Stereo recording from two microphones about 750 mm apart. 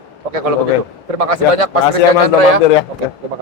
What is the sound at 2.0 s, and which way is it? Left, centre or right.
Speech, left.